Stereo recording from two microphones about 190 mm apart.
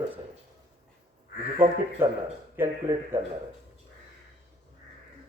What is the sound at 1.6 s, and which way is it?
A man's voice, 10° right (ahead or behind).